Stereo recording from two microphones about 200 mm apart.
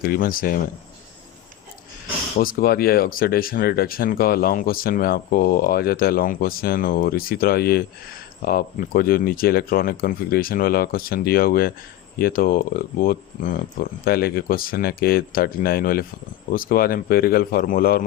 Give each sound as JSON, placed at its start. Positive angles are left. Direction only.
{"t": 0.0, "sound": "speech", "side_deg": 45}
{"t": 2.4, "sound": "speech", "side_deg": 45}